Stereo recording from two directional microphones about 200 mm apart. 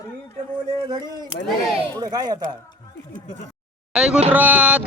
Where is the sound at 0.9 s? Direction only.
20° right (ahead or behind).